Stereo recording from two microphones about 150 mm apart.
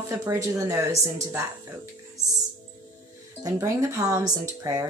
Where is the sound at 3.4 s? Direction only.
20° right (ahead or behind).